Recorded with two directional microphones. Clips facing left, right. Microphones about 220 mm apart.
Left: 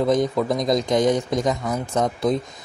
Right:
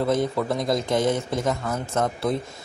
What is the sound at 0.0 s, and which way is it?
Speech, 15° left (ahead or behind).